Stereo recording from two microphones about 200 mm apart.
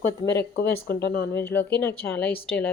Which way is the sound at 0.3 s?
60° left (ahead or behind).